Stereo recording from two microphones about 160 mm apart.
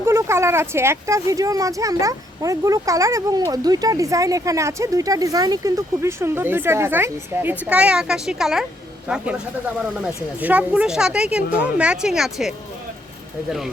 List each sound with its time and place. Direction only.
0.0 s a woman's voice: 15° right (ahead or behind)